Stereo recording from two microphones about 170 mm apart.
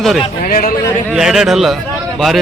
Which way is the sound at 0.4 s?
55° left (ahead or behind).